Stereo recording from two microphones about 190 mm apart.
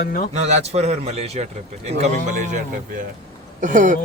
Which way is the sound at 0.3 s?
35° right (ahead or behind).